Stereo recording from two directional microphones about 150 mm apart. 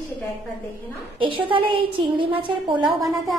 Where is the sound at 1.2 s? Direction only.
35° right (ahead or behind).